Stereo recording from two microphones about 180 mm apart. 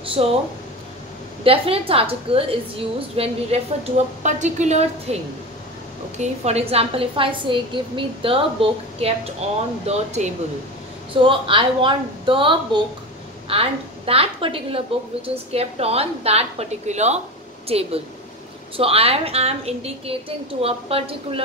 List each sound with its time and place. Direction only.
0.1 s speech: 35° right (ahead or behind)
1.4 s a woman's voice: 30° right (ahead or behind)
6.1 s a woman's voice: 40° right (ahead or behind)
11.2 s a woman's voice: 30° right (ahead or behind)